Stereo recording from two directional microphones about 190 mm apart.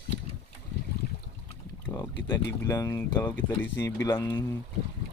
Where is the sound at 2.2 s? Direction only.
20° left (ahead or behind).